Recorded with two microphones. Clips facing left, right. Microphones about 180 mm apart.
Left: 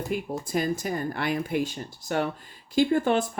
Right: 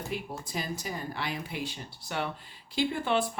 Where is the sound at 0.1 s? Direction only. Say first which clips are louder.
Left 10 dB; 50° left (ahead or behind).